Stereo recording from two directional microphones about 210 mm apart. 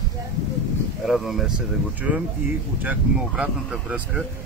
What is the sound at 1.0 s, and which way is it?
A man's voice, centre (ahead or behind).